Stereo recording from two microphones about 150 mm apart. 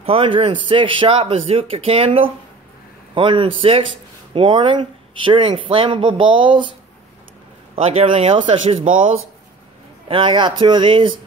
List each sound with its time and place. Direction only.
0.0 s speech: 40° right (ahead or behind)
7.7 s speech: 45° right (ahead or behind)
10.0 s speech: 35° right (ahead or behind)